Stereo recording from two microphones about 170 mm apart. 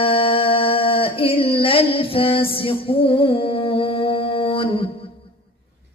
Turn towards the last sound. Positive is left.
turn(degrees=30)  # may be behind; listen again after turning